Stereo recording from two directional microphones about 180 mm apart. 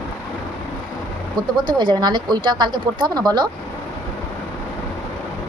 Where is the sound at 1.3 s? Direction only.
25° right (ahead or behind).